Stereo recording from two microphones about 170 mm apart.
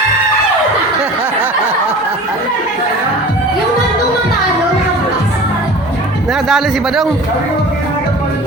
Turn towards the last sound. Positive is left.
turn(degrees=-5)  # may be behind; listen again after turning